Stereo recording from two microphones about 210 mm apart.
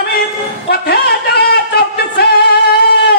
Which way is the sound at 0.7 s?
50° left (ahead or behind).